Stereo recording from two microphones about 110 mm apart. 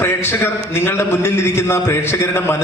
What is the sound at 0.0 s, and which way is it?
A man's voice, 20° left (ahead or behind).